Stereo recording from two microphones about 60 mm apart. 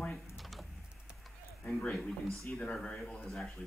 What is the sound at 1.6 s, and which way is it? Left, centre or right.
Speech, centre.